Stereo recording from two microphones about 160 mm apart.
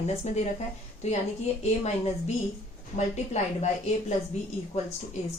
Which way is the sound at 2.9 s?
45° left (ahead or behind).